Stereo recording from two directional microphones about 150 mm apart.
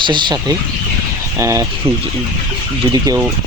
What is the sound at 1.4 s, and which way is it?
Speech, 20° right (ahead or behind).